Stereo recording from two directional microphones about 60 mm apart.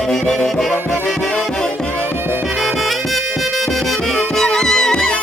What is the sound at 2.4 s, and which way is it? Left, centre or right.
Music, centre.